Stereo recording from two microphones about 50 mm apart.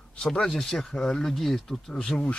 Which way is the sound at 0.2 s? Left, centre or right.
Centre.